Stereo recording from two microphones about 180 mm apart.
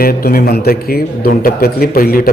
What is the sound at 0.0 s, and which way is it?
A man's voice, 55° left (ahead or behind).